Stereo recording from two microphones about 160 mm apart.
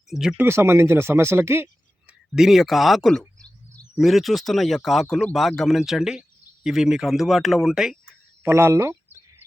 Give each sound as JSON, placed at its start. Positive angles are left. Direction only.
{"t": 0.1, "sound": "speech", "side_deg": -5}
{"t": 0.4, "sound": "speech", "side_deg": -15}
{"t": 2.3, "sound": "speech", "side_deg": 0}
{"t": 8.4, "sound": "speech", "side_deg": -15}